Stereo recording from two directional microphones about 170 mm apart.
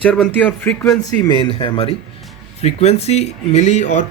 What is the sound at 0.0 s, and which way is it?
Speech, 5° left (ahead or behind).